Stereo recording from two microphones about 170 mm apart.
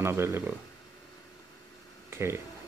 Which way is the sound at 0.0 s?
15° right (ahead or behind).